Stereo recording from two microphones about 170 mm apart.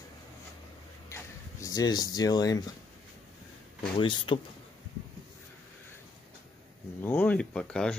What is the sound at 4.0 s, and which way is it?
Speech, 30° left (ahead or behind).